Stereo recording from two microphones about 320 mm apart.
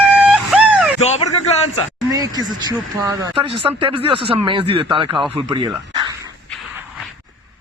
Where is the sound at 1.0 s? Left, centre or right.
Centre.